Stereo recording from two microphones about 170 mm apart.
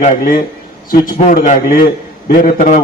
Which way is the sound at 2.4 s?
50° left (ahead or behind).